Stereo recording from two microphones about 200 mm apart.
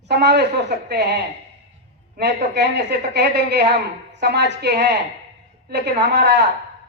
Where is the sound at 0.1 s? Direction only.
55° right (ahead or behind).